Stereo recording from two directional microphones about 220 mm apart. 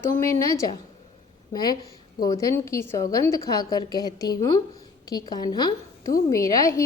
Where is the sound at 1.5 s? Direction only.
20° left (ahead or behind).